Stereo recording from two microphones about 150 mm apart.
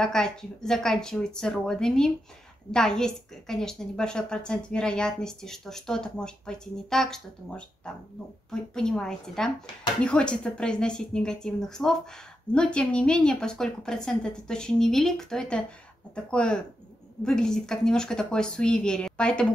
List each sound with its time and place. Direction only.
0.0 s a woman's voice: 5° left (ahead or behind)